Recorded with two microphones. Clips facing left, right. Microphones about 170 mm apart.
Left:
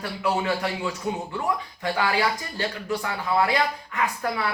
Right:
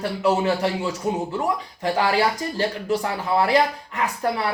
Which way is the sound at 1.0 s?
40° right (ahead or behind).